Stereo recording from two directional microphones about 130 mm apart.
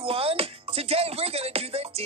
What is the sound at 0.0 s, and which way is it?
Music, 45° right (ahead or behind).